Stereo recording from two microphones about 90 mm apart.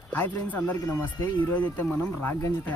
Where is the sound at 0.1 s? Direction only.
15° left (ahead or behind).